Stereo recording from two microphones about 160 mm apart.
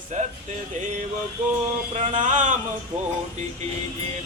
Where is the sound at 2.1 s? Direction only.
50° right (ahead or behind).